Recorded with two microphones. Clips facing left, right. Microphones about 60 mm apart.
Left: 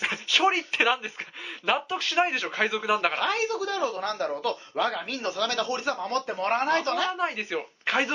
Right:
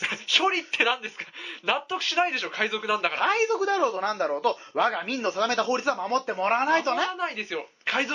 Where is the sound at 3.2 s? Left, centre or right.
Right.